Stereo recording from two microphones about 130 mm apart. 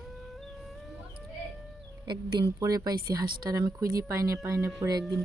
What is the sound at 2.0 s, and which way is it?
A woman's voice, 35° right (ahead or behind).